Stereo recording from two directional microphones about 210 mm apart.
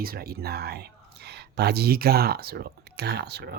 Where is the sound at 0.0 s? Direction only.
45° right (ahead or behind).